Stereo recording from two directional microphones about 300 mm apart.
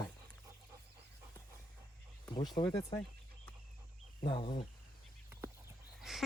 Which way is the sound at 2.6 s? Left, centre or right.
Centre.